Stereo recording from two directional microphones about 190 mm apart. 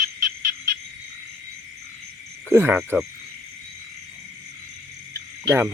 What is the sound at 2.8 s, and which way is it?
Cricket, centre (ahead or behind).